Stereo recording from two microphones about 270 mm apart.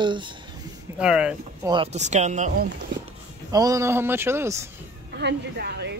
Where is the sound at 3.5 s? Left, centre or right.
Centre.